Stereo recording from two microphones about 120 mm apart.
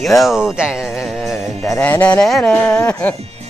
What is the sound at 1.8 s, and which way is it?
Speech, 15° left (ahead or behind).